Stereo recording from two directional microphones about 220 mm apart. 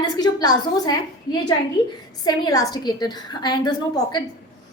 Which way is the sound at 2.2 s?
20° left (ahead or behind).